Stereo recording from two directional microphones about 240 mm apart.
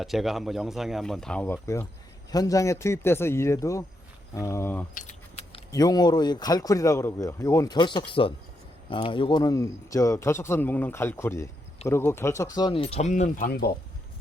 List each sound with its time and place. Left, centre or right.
0.0 s speech: centre
4.9 s keys jangling: left
5.7 s speech: centre; by 13.7 s left